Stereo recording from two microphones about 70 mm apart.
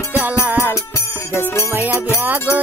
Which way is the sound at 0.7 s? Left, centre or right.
Left.